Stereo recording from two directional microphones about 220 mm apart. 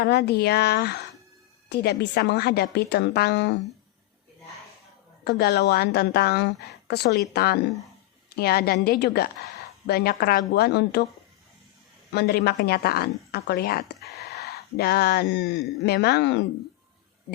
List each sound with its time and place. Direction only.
0.0 s a woman's voice: 50° left (ahead or behind)
5.2 s a woman's voice: 45° left (ahead or behind)
12.1 s a woman's voice: 45° left (ahead or behind)